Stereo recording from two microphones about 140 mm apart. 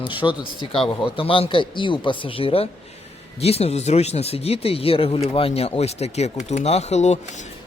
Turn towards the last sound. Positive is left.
turn(degrees=55)  # may be behind; listen again after turning